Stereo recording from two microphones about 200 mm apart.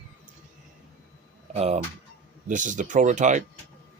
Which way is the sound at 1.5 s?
30° right (ahead or behind).